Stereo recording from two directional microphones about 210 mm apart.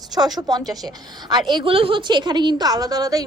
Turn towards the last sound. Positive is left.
turn(degrees=-15)  # may be behind; listen again after turning